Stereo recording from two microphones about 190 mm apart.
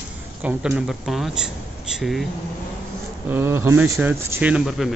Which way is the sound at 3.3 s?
10° right (ahead or behind).